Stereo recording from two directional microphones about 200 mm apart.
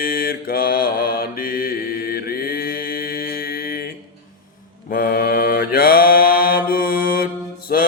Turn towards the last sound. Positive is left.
turn(degrees=45)  # may be behind; listen again after turning